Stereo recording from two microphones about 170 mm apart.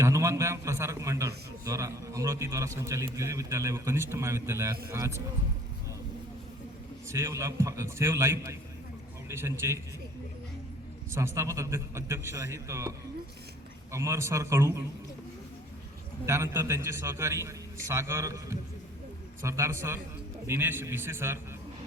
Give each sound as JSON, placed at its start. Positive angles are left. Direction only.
{"t": 0.0, "sound": "a man's voice", "side_deg": -15}
{"t": 7.1, "sound": "a man's voice", "side_deg": -15}
{"t": 11.1, "sound": "a man's voice", "side_deg": -15}
{"t": 13.9, "sound": "a man's voice", "side_deg": -15}
{"t": 16.2, "sound": "a man's voice", "side_deg": -15}